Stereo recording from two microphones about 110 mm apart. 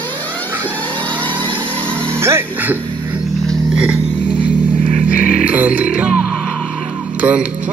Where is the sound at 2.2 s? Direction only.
25° right (ahead or behind).